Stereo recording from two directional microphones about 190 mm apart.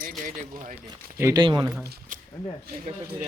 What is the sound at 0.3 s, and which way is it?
Speech, 45° right (ahead or behind).